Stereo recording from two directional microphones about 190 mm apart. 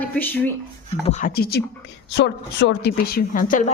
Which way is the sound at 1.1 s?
45° left (ahead or behind).